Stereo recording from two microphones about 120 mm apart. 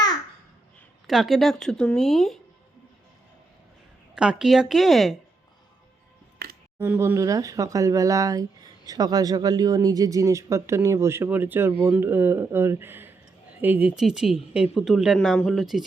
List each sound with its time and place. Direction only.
1.0 s a woman's voice: centre (ahead or behind)
4.1 s a woman's voice: 5° right (ahead or behind)
6.7 s speech: 15° right (ahead or behind)
7.2 s a woman's voice: 30° right (ahead or behind); by 15.8 s centre (ahead or behind)